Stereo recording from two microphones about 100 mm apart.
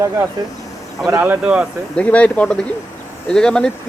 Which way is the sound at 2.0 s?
15° left (ahead or behind).